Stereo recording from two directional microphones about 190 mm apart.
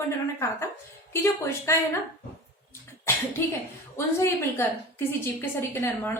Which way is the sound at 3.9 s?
15° left (ahead or behind).